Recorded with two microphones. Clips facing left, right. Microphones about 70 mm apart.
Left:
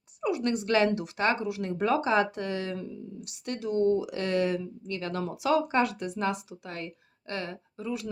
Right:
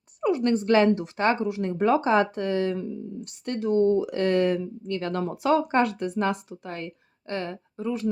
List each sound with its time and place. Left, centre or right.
0.2 s speech: right